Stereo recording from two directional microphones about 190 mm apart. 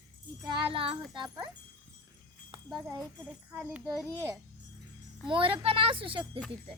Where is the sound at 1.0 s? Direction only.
Centre (ahead or behind).